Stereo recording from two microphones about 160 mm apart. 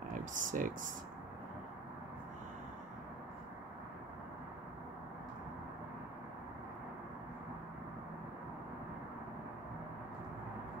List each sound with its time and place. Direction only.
0.1 s speech: 55° right (ahead or behind)